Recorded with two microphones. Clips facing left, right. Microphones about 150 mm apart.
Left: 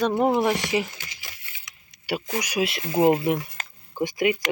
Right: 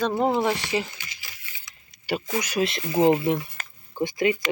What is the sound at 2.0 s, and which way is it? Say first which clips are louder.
Speech: right 1 dB; 10° left (ahead or behind).